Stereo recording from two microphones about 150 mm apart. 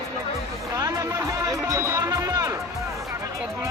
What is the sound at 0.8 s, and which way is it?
Music, 25° right (ahead or behind).